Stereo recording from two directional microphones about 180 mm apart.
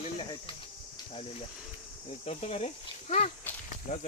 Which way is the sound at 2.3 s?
35° left (ahead or behind).